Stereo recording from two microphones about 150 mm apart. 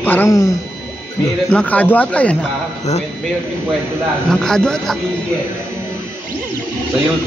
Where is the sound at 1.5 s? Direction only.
10° left (ahead or behind).